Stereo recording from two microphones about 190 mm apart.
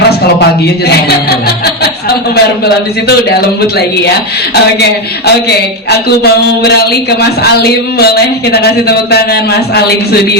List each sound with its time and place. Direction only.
0.3 s speech: 60° left (ahead or behind)
4.5 s speech: 60° left (ahead or behind)